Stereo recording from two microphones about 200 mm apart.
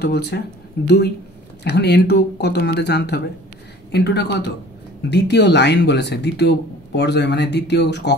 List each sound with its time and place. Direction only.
0.0 s speech: 55° left (ahead or behind)